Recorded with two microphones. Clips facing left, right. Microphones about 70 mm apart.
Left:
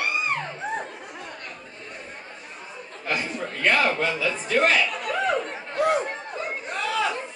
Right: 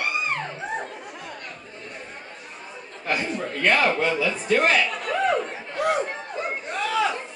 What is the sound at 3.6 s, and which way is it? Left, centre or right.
A man's voice, centre.